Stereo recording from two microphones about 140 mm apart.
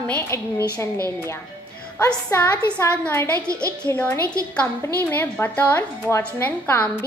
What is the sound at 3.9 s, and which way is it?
A woman's voice, 15° left (ahead or behind).